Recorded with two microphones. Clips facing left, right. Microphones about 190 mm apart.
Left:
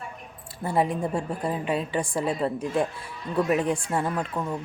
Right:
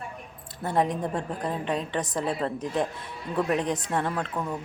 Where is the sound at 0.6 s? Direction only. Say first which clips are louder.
Left 1 dB; 5° left (ahead or behind).